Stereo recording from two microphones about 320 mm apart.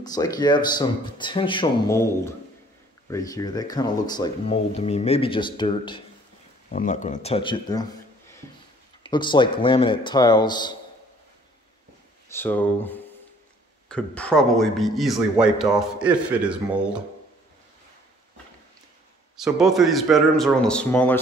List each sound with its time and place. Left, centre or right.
0.0 s speech: centre
9.0 s speech: centre
12.3 s a man's voice: centre
19.3 s a man's voice: centre